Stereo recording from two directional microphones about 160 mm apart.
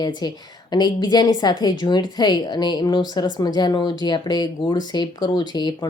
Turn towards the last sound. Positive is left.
turn(degrees=25)  # may be behind; listen again after turning